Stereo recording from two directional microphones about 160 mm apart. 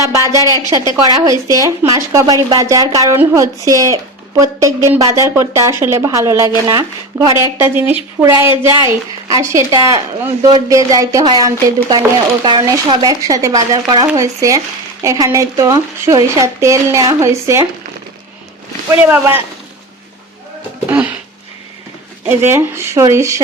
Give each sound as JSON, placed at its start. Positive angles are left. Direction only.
{"t": 0.0, "sound": "a woman's voice", "side_deg": -20}
{"t": 18.9, "sound": "a woman's voice", "side_deg": -15}
{"t": 22.3, "sound": "a woman's voice", "side_deg": -15}